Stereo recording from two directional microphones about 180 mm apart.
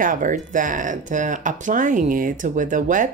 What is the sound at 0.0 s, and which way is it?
Speech, 50° right (ahead or behind).